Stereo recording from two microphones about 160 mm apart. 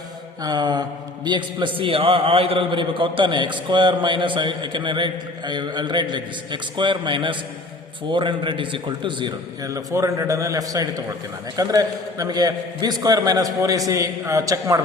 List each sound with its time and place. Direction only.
0.4 s a man's voice: 25° right (ahead or behind)